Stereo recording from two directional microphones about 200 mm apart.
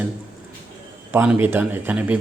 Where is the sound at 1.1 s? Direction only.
10° right (ahead or behind).